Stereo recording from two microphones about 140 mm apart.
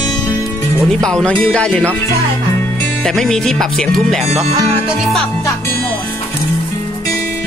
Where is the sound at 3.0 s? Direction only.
5° left (ahead or behind).